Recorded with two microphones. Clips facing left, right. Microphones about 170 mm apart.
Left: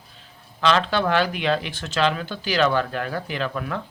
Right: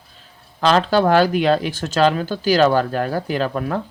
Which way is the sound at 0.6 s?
40° right (ahead or behind).